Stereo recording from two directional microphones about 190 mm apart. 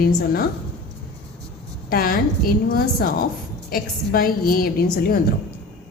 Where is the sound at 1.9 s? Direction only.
50° left (ahead or behind).